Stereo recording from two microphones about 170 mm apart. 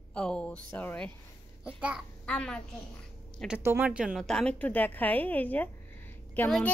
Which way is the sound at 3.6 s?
10° right (ahead or behind).